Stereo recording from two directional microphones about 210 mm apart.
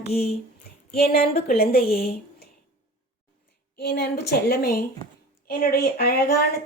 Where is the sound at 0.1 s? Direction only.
50° left (ahead or behind).